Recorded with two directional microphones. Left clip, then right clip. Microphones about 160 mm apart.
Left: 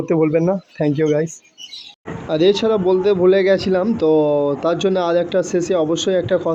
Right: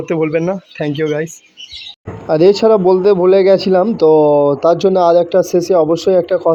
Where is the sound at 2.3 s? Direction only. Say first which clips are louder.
Right 6 dB; 40° right (ahead or behind).